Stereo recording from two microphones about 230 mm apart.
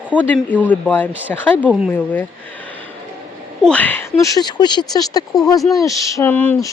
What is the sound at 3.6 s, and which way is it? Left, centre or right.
Speech, centre.